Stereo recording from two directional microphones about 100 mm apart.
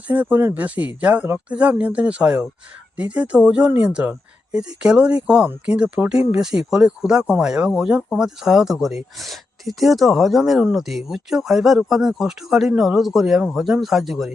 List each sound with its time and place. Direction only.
0.1 s speech: 15° right (ahead or behind)